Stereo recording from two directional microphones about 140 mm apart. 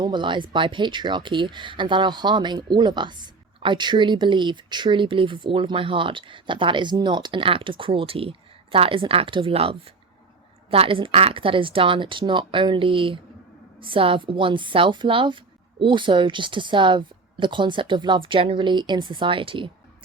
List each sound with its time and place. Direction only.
0.0 s speech: 35° right (ahead or behind)